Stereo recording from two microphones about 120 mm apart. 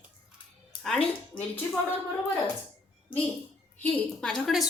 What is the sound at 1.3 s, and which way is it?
Speech, 45° left (ahead or behind).